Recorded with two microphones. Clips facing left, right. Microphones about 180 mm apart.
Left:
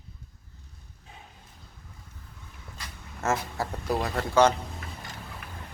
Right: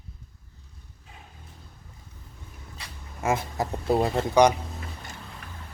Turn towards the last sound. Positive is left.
turn(degrees=-15)  # may be behind; listen again after turning